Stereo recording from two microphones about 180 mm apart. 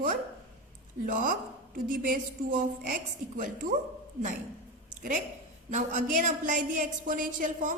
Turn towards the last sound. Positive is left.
turn(degrees=-45)  # may be behind; listen again after turning